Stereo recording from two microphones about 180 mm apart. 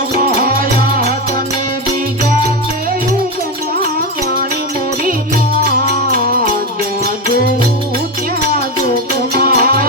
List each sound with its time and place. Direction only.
9.4 s music: 55° right (ahead or behind)